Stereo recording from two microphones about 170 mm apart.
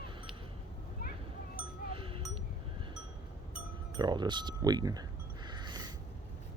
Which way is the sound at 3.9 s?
25° right (ahead or behind).